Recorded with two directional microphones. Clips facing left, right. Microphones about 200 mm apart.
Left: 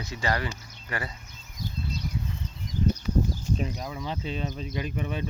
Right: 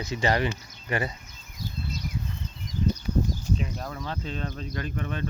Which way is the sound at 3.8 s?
10° left (ahead or behind).